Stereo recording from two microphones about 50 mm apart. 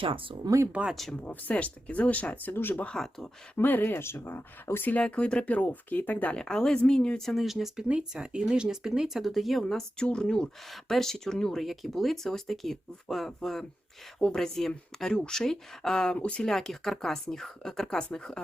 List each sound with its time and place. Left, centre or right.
0.7 s speech: right
1.2 s speech: left
3.9 s speech: left
4.9 s speech: left
6.3 s speech: centre
7.4 s speech: centre
7.9 s speech: centre
9.6 s speech: centre
11.6 s speech: centre
16.1 s speech: left
16.5 s speech: centre